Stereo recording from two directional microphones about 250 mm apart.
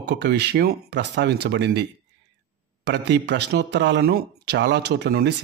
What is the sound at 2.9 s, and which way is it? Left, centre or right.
Speech, right.